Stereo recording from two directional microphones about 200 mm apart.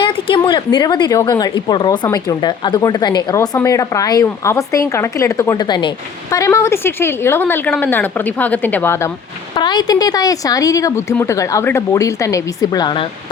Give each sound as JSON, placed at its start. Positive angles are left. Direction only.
{"t": 0.0, "sound": "a woman's voice", "side_deg": 25}
{"t": 9.6, "sound": "a woman's voice", "side_deg": 20}